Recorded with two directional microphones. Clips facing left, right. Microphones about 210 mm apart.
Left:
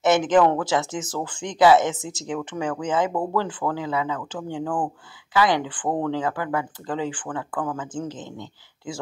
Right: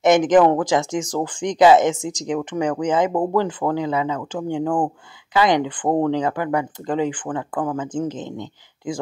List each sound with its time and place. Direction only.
0.0 s speech: 15° right (ahead or behind)